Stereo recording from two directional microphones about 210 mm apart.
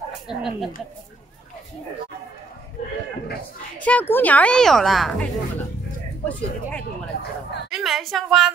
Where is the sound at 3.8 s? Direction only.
10° left (ahead or behind).